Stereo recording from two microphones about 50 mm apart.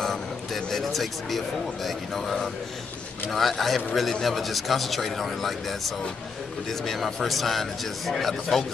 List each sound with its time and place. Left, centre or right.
0.0 s a man's voice: centre